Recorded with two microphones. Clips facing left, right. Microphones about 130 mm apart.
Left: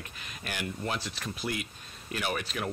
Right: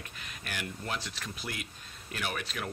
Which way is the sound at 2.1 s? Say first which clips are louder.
Left 4 dB; 10° left (ahead or behind).